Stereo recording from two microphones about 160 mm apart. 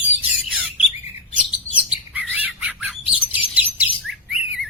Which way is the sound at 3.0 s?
35° left (ahead or behind).